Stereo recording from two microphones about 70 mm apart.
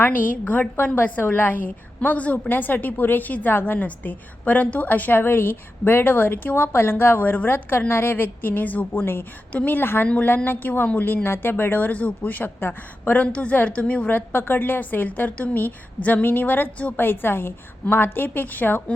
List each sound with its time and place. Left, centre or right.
0.0 s a woman's voice: left